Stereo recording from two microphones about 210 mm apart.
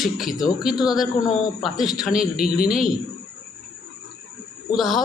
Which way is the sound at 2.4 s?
45° left (ahead or behind).